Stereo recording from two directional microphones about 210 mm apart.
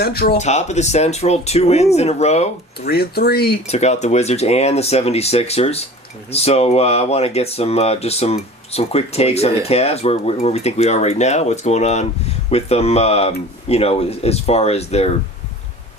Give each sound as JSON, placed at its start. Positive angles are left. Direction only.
{"t": 0.0, "sound": "speech", "side_deg": 45}
{"t": 0.3, "sound": "speech", "side_deg": 30}
{"t": 2.8, "sound": "speech", "side_deg": 45}
{"t": 3.7, "sound": "speech", "side_deg": 30}